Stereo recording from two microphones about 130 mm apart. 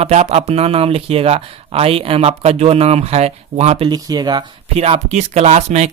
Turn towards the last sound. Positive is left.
turn(degrees=-55)  # may be behind; listen again after turning